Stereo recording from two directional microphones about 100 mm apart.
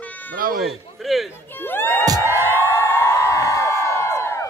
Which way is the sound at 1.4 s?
20° left (ahead or behind).